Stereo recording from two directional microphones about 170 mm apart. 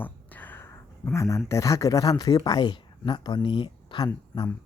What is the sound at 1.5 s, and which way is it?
Speech, 20° left (ahead or behind).